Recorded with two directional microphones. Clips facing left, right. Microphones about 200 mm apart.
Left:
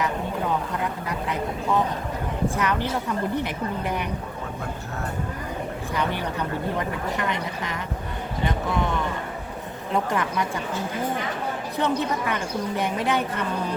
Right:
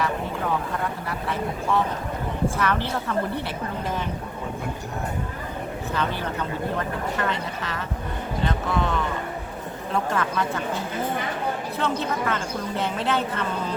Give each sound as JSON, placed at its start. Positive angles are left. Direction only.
{"t": 2.6, "sound": "speech", "side_deg": 15}
{"t": 5.9, "sound": "speech", "side_deg": 15}
{"t": 11.8, "sound": "speech", "side_deg": 15}